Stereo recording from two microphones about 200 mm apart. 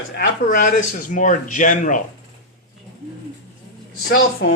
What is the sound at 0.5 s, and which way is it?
Speech, 40° left (ahead or behind).